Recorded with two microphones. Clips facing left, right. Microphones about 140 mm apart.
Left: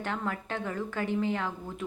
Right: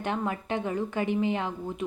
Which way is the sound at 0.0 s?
20° right (ahead or behind).